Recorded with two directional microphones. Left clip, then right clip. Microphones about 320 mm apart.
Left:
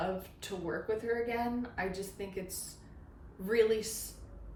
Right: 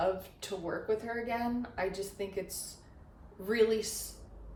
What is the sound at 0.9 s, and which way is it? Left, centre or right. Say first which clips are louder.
A woman's voice: left 1 dB; centre.